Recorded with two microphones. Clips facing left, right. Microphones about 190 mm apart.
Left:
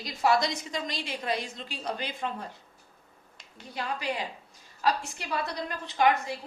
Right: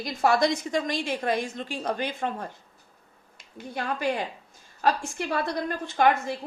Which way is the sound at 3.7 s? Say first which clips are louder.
Right 5 dB; 50° right (ahead or behind).